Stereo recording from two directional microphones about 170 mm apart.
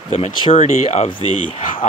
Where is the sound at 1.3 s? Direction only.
50° left (ahead or behind).